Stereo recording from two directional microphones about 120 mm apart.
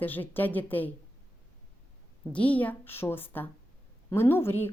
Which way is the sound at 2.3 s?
10° left (ahead or behind).